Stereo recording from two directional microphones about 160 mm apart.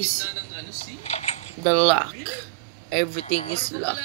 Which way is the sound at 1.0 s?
40° left (ahead or behind).